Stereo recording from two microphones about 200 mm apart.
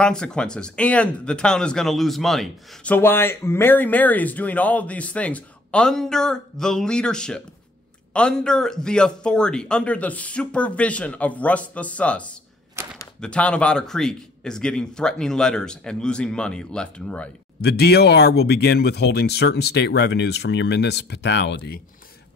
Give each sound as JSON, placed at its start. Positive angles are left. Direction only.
{"t": 0.0, "sound": "speech", "side_deg": 5}
{"t": 12.8, "sound": "a sound", "side_deg": -15}
{"t": 13.2, "sound": "speech", "side_deg": 5}
{"t": 17.6, "sound": "speech", "side_deg": 55}